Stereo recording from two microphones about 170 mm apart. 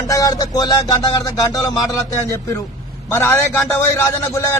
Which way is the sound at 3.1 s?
15° left (ahead or behind).